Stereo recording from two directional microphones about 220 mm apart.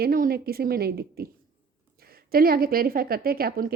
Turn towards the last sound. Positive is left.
turn(degrees=-40)  # may be behind; listen again after turning